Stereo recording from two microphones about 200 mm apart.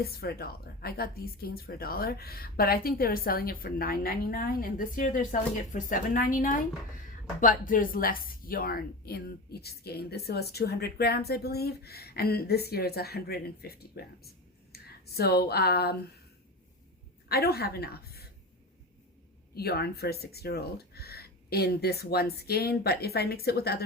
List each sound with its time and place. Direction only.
0.0 s a woman's voice: 50° left (ahead or behind)
17.2 s a woman's voice: 50° left (ahead or behind)
19.5 s a woman's voice: 50° left (ahead or behind)